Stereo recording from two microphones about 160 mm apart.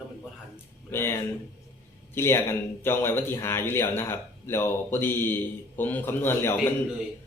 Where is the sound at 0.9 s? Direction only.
15° left (ahead or behind).